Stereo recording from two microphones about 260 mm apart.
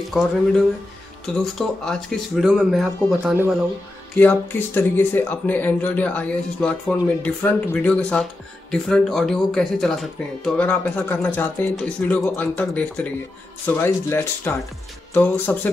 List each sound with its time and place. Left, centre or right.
0.2 s speech: centre